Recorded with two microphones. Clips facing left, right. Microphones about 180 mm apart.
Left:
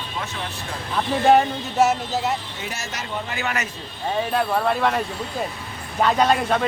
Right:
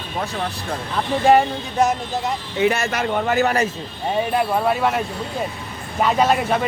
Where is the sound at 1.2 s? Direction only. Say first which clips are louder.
Right 1 dB; centre (ahead or behind).